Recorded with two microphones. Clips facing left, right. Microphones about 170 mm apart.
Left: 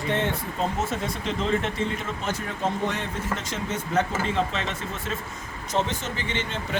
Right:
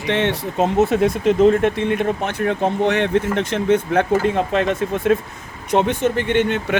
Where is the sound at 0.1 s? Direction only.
80° right.